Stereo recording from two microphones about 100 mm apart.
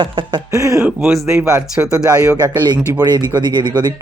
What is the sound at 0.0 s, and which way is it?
Speech, 55° right (ahead or behind).